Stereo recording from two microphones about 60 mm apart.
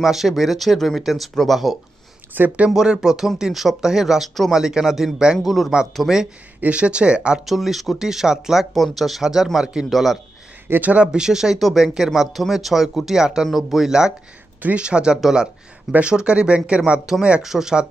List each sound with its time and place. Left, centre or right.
0.0 s speech: centre
2.3 s speech: right
2.7 s speech: centre
5.4 s speech: centre
7.4 s speech: centre
10.7 s speech: right
11.1 s speech: centre
14.6 s speech: right
17.0 s speech: centre